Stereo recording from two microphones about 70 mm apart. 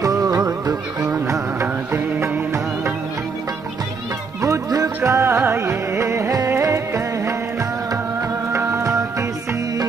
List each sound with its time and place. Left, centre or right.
0.0 s music: right
1.0 s music: right
4.4 s music: right
5.0 s music: right
8.5 s music: right